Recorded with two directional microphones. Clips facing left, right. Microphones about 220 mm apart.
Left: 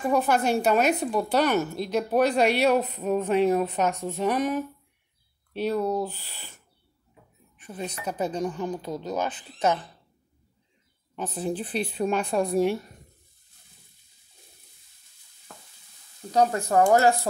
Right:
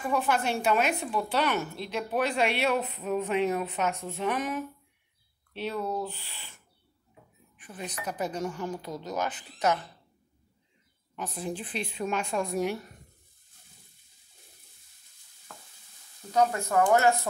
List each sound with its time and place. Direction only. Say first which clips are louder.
0.0 s a woman's voice: left 5 dB; 40° left (ahead or behind)
7.6 s speech: left 4 dB; 25° left (ahead or behind)
11.1 s a woman's voice: left 5 dB; 30° left (ahead or behind)
16.3 s a woman's voice: left 3 dB; 35° left (ahead or behind)